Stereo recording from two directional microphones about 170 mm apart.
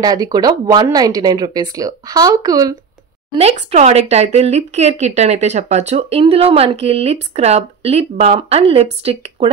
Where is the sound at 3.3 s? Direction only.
40° right (ahead or behind).